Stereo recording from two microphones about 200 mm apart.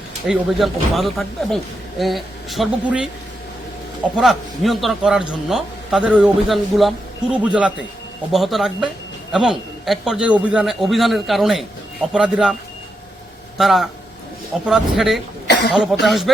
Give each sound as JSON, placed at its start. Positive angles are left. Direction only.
{"t": 0.3, "sound": "a man's voice", "side_deg": 0}
{"t": 4.2, "sound": "a man's voice", "side_deg": 0}
{"t": 13.6, "sound": "a man's voice", "side_deg": 0}
{"t": 15.4, "sound": "cough", "side_deg": 55}
{"t": 15.7, "sound": "a man's voice", "side_deg": 0}